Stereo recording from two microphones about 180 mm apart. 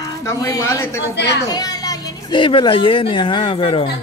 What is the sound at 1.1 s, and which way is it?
Speech, 70° left (ahead or behind).